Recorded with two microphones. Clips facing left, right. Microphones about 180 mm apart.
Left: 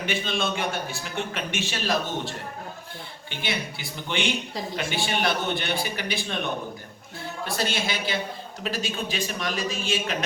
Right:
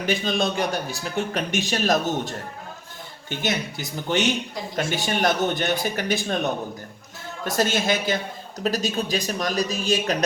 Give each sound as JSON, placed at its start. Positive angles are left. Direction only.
{"t": 0.0, "sound": "a man's voice", "side_deg": -40}